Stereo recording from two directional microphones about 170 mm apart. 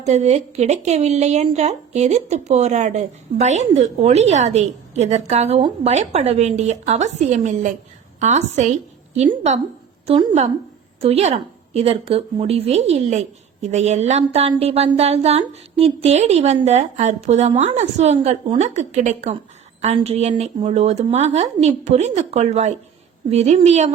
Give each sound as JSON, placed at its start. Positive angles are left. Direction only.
{"t": 0.0, "sound": "a woman's voice", "side_deg": -40}